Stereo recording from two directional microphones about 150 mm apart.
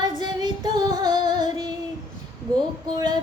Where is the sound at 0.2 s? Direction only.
30° right (ahead or behind).